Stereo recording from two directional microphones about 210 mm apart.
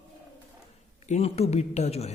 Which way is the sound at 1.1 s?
30° left (ahead or behind).